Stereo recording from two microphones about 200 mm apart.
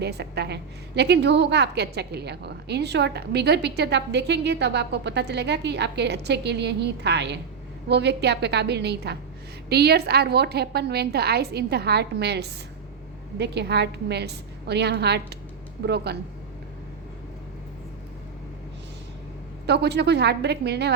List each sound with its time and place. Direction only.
0.0 s a woman's voice: 55° right (ahead or behind)
19.6 s a woman's voice: 55° right (ahead or behind)